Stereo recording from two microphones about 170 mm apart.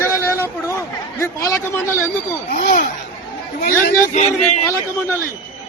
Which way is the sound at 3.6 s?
50° left (ahead or behind).